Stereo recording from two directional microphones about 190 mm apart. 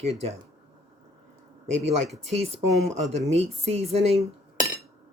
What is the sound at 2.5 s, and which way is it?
Speech, 35° right (ahead or behind).